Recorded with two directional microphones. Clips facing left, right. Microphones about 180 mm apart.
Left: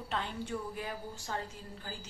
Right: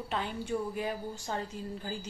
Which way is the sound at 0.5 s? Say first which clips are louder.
Right 8 dB; 20° right (ahead or behind).